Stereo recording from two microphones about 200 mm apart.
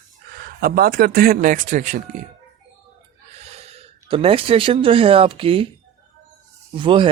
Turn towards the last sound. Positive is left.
turn(degrees=-25)  # may be behind; listen again after turning